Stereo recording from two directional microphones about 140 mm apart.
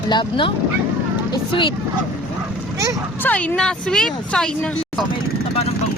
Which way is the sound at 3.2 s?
10° left (ahead or behind).